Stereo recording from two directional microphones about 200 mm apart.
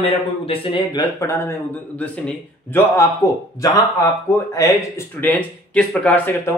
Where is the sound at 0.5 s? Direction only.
25° left (ahead or behind).